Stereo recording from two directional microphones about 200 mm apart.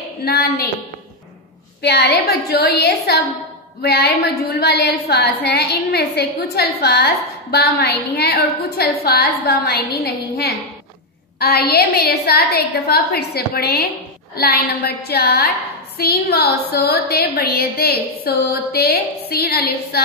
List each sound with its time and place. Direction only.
0.2 s a woman's voice: 50° left (ahead or behind)
1.8 s a woman's voice: 55° left (ahead or behind)